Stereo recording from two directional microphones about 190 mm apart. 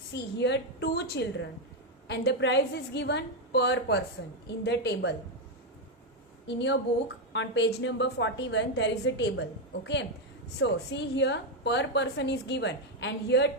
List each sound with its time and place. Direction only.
0.1 s a woman's voice: 65° left (ahead or behind)
6.5 s a woman's voice: 70° left (ahead or behind)